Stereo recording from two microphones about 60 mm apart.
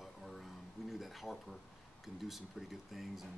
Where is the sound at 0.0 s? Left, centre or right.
Centre.